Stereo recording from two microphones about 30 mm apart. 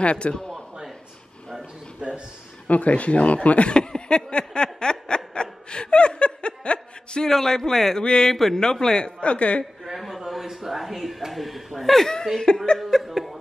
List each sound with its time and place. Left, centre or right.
0.0 s a man's voice: left
2.0 s a sound: right
2.7 s speech: left
3.7 s a sound: left
7.2 s speech: centre
8.0 s a woman's voice: left
8.3 s speech: centre
8.5 s a man's voice: left
9.0 s a woman's voice: left
9.9 s a sound: centre
10.4 s speech: centre
12.5 s a woman's voice: left
13.0 s chuckle: centre